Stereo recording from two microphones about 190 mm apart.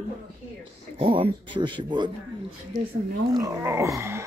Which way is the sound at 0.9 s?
30° right (ahead or behind).